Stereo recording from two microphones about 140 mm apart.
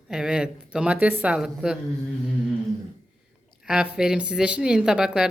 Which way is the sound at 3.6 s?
5° right (ahead or behind).